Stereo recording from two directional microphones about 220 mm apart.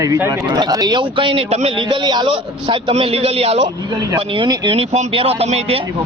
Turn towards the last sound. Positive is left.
turn(degrees=-25)  # may be behind; listen again after turning